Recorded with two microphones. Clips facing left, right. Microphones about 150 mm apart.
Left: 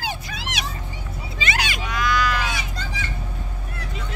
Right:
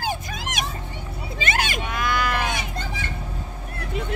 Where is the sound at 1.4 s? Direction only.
50° right (ahead or behind).